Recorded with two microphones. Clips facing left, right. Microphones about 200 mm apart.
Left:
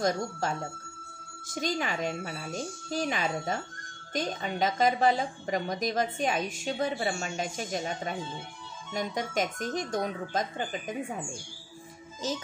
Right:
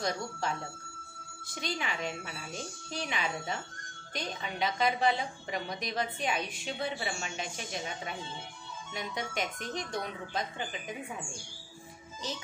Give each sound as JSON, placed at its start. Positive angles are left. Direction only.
{"t": 0.0, "sound": "a woman's voice", "side_deg": 45}
{"t": 12.2, "sound": "a woman's voice", "side_deg": 45}